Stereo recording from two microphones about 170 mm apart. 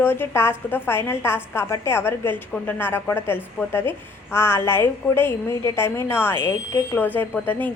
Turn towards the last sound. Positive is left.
turn(degrees=10)  # may be behind; listen again after turning